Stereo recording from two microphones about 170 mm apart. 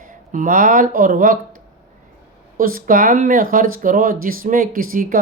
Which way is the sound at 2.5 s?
55° right (ahead or behind).